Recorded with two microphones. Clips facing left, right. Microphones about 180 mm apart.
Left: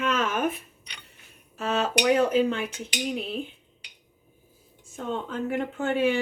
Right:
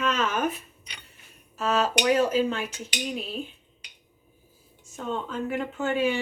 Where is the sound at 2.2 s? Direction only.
60° left (ahead or behind).